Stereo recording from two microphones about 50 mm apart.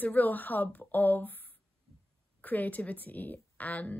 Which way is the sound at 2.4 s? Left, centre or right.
Left.